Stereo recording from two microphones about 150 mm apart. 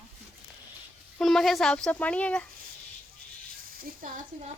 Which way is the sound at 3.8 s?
70° right (ahead or behind).